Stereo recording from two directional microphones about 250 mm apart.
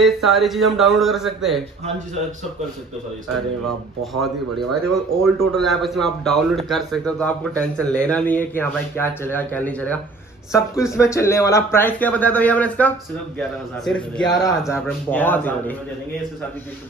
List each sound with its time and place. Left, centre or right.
0.0 s a man's voice: centre
4.0 s a man's voice: centre
14.2 s speech: centre